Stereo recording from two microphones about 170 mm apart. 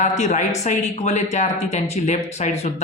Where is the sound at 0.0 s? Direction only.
45° left (ahead or behind).